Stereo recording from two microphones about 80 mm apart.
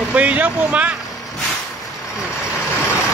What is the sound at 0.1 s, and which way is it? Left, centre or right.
Speech, centre.